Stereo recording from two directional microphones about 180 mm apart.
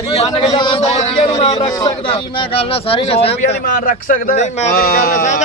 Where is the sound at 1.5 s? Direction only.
20° left (ahead or behind).